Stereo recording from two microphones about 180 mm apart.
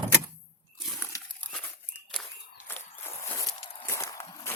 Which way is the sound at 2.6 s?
10° left (ahead or behind).